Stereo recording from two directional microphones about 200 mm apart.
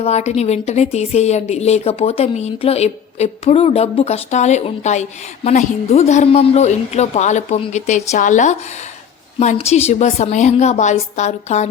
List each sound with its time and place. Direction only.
0.0 s a woman's voice: 35° left (ahead or behind)